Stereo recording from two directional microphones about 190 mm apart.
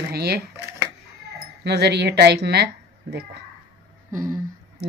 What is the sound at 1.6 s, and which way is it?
Speech, 60° right (ahead or behind).